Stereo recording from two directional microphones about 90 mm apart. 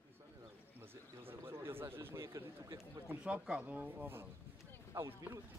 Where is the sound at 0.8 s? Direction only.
25° right (ahead or behind).